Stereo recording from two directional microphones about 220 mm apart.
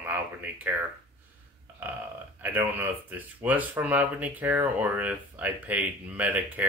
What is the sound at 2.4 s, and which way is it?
Speech, 10° right (ahead or behind).